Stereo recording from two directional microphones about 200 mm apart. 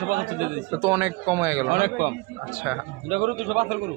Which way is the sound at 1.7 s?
40° right (ahead or behind).